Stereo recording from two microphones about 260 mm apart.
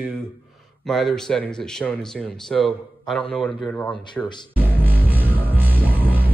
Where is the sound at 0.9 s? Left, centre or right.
Centre.